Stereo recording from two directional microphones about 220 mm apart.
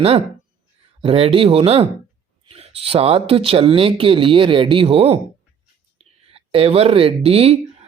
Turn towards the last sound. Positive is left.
turn(degrees=-25)  # may be behind; listen again after turning